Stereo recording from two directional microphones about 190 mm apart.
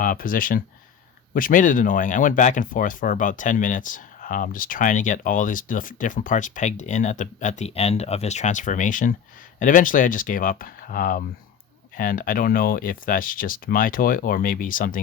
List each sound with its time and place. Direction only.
0.0 s speech: 45° left (ahead or behind)